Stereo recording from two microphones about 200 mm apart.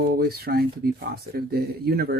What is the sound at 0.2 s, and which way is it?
Speech, 50° right (ahead or behind).